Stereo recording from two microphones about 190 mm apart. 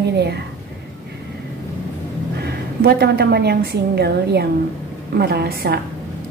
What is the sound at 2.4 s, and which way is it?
A woman's voice, 55° right (ahead or behind).